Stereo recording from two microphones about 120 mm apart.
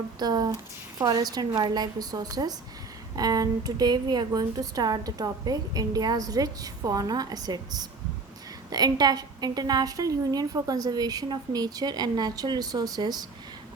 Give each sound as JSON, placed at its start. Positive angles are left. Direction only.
{"t": 0.2, "sound": "a woman's voice", "side_deg": -35}